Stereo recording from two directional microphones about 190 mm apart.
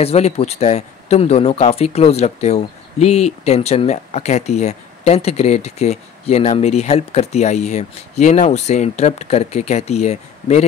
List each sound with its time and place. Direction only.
0.0 s speech: 35° left (ahead or behind)